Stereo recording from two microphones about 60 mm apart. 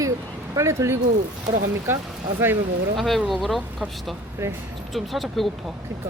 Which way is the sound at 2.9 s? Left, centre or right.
Centre.